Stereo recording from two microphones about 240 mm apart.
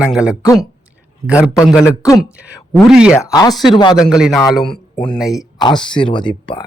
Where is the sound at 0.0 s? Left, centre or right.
Centre.